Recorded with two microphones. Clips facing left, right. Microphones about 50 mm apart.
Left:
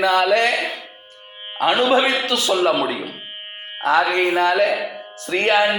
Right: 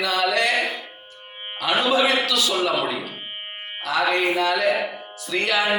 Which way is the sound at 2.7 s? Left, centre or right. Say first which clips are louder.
Left 2 dB; left.